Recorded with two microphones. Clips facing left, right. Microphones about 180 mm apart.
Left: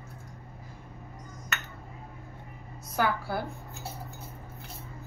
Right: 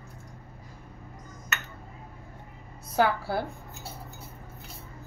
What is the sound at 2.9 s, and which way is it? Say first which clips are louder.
Speech: right 4 dB; 30° right (ahead or behind).